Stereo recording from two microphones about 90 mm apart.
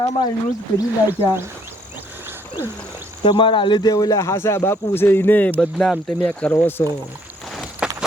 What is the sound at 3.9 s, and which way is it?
Speech, 40° left (ahead or behind).